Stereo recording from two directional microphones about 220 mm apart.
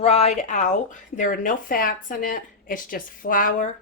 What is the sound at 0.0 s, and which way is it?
Speech, 30° left (ahead or behind).